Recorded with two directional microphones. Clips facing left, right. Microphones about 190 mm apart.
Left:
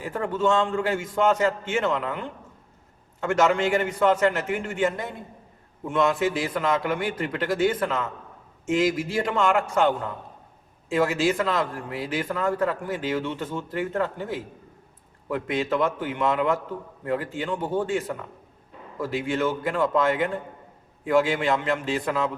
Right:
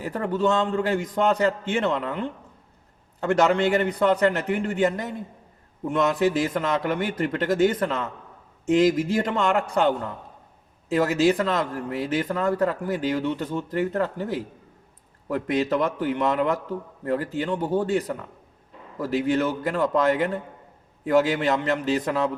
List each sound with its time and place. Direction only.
0.0 s a man's voice: 40° right (ahead or behind)